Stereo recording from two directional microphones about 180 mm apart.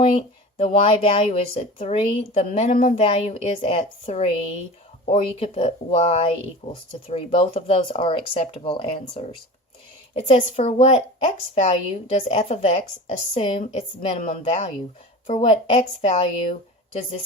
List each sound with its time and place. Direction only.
0.0 s speech: 30° left (ahead or behind)